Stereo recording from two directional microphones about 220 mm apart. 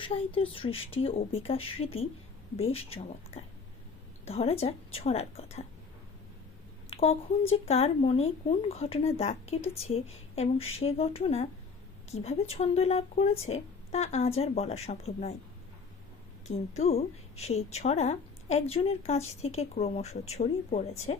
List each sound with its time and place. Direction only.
0.0 s speech: 25° left (ahead or behind)
6.9 s a woman's voice: 30° left (ahead or behind)
16.5 s speech: 30° left (ahead or behind)